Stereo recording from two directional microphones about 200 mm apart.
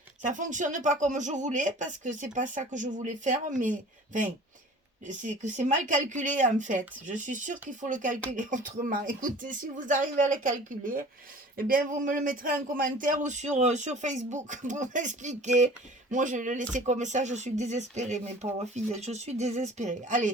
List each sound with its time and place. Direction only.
0.3 s speech: 40° right (ahead or behind)